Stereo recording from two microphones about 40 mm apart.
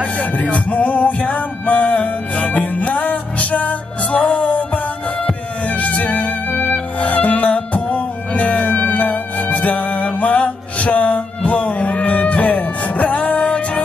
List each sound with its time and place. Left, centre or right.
0.0 s music: left
5.7 s music: left